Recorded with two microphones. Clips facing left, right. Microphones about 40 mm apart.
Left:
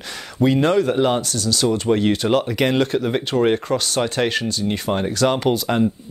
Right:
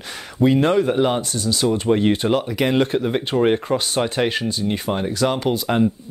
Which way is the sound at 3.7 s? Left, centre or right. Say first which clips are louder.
Even; centre.